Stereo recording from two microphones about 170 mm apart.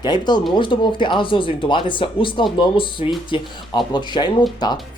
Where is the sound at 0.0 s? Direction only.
25° left (ahead or behind).